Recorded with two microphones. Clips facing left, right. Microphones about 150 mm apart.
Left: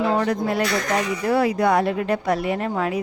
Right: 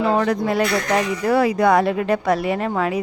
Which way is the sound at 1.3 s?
90° right.